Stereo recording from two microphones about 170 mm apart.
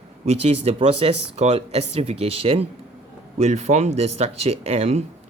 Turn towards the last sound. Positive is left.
turn(degrees=-40)  # may be behind; listen again after turning